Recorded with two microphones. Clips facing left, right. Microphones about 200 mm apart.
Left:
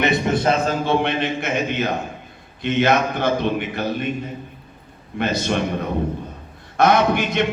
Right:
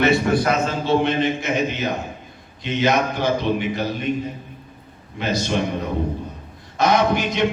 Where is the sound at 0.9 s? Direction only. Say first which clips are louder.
Right 2 dB; 60° left (ahead or behind).